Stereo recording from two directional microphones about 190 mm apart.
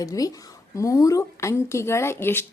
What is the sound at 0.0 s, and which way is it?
A woman's voice, 20° left (ahead or behind).